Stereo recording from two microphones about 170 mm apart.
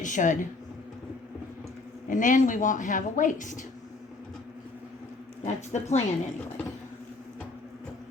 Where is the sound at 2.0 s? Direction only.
50° left (ahead or behind).